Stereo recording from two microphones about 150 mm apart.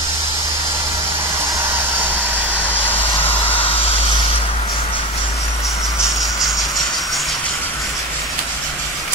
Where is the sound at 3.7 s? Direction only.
40° left (ahead or behind).